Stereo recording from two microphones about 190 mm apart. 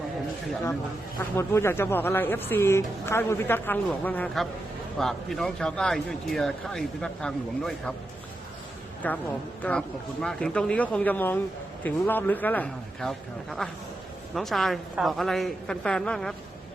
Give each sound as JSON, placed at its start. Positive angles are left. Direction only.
{"t": 1.2, "sound": "speech", "side_deg": 15}
{"t": 9.0, "sound": "speech", "side_deg": 10}